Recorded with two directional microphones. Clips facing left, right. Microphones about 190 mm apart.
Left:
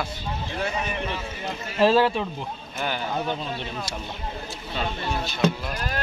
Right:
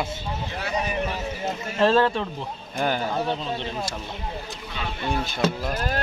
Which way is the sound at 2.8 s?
40° right (ahead or behind).